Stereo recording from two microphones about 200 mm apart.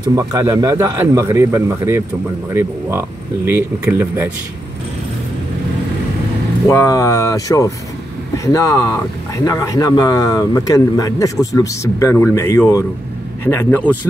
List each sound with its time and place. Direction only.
0.1 s a man's voice: 15° right (ahead or behind)
6.7 s speech: 15° left (ahead or behind)